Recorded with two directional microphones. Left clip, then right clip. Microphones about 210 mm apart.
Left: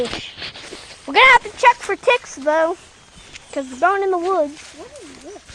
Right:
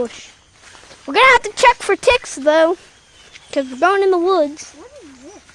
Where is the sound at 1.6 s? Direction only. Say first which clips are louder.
Right 2 dB; 55° right (ahead or behind).